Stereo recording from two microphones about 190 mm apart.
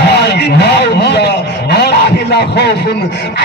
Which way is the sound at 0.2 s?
60° left (ahead or behind).